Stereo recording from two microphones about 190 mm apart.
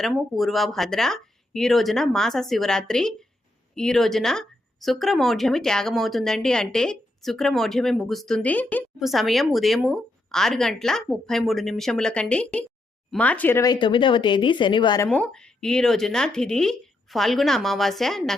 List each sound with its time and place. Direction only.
0.0 s speech: centre (ahead or behind); by 15.0 s 25° left (ahead or behind)
15.0 s speech: 5° left (ahead or behind)